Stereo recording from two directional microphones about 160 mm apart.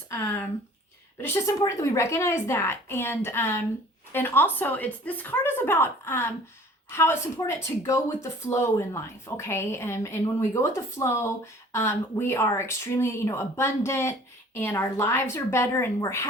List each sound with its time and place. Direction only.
0.1 s speech: 15° left (ahead or behind)